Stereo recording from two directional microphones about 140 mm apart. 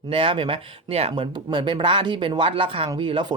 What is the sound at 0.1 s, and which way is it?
A man's voice, 40° right (ahead or behind).